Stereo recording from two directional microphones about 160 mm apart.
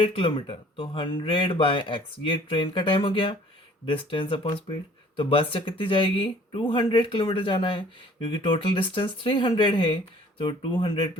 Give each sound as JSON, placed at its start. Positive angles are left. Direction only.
{"t": 0.0, "sound": "speech", "side_deg": 35}